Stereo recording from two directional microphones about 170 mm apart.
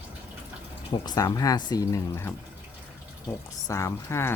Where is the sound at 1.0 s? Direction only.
25° left (ahead or behind).